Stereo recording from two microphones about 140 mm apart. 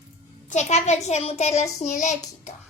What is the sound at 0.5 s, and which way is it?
A child's voice, 55° left (ahead or behind).